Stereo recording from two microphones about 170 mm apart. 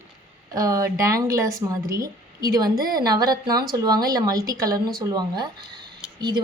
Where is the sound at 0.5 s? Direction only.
20° right (ahead or behind).